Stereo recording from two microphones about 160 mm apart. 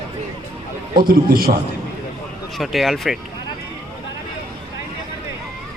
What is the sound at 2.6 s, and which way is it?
Speech, centre (ahead or behind).